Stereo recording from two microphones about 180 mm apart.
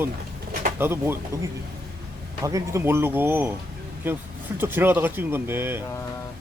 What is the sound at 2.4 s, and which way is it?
Speech, 15° right (ahead or behind).